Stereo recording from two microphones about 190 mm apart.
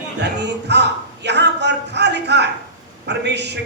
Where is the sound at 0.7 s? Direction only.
65° right (ahead or behind).